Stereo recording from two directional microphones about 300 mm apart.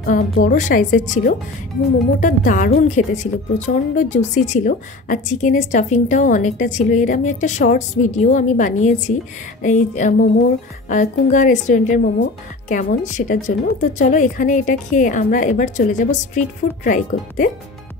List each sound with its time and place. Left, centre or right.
0.0 s a woman's voice: left